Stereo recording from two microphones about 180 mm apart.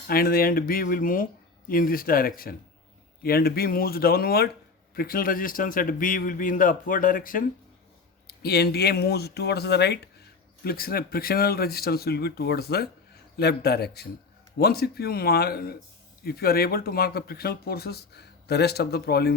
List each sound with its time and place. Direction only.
0.1 s speech: 55° left (ahead or behind)
8.3 s speech: 60° left (ahead or behind)